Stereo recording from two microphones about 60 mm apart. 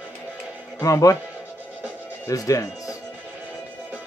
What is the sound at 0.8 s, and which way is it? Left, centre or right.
Speech, left.